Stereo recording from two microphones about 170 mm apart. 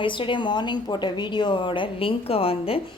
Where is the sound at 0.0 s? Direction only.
30° left (ahead or behind).